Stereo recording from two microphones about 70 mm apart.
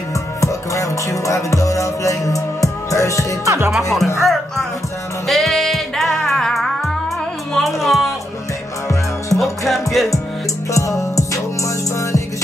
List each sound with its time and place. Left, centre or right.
0.4 s music: left
3.4 s speech: right
3.7 s speech: centre
4.2 s music: centre
9.4 s music: centre
10.7 s music: left